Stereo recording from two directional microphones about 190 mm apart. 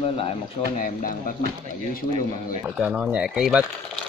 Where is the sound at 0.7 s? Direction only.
45° left (ahead or behind).